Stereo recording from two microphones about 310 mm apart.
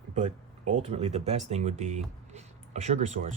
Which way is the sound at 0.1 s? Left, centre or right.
Right.